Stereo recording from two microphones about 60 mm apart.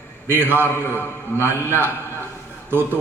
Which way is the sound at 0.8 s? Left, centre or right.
Left.